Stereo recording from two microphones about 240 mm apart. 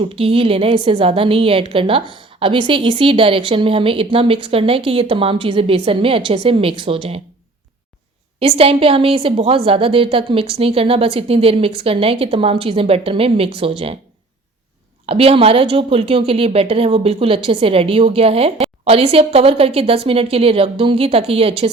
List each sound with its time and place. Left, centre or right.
0.0 s a woman's voice: right
8.4 s a woman's voice: right
15.0 s a woman's voice: right